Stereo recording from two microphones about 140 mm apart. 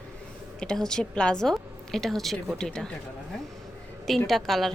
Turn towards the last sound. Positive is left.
turn(degrees=0)  # may be behind; listen again after turning